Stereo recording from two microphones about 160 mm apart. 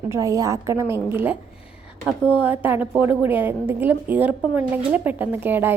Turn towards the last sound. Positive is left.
turn(degrees=-10)  # may be behind; listen again after turning